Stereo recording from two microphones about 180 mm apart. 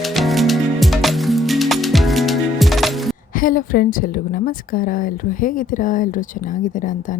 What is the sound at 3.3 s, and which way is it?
A woman's voice, 50° left (ahead or behind).